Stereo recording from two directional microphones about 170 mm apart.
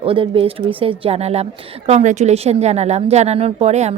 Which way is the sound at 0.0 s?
30° right (ahead or behind).